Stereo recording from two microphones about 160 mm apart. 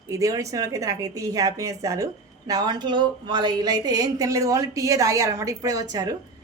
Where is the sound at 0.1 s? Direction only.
20° right (ahead or behind).